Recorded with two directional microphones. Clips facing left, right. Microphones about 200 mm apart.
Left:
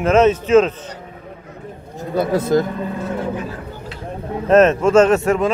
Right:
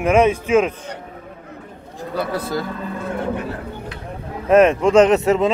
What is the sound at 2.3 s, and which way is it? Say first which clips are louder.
Speech: left 7 dB; 45° left (ahead or behind).